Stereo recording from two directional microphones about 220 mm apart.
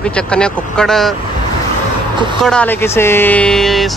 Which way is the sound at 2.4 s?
5° left (ahead or behind).